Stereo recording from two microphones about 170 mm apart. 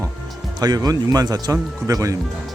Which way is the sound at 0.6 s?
20° right (ahead or behind).